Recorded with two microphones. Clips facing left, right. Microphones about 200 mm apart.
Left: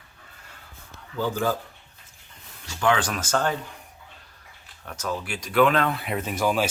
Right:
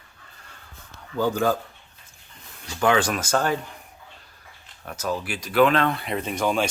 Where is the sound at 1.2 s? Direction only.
60° right (ahead or behind).